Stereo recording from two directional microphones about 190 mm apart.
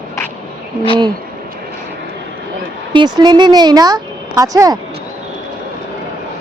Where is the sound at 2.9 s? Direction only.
20° right (ahead or behind).